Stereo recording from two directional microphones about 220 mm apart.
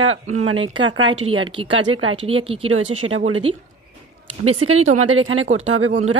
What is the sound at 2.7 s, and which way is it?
Speech, 65° right (ahead or behind).